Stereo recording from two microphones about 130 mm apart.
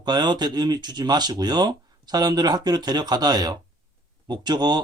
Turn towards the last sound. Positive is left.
turn(degrees=-35)  # may be behind; listen again after turning